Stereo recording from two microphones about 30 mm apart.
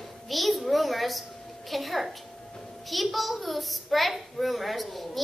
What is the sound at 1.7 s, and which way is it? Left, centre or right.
A child's voice, centre.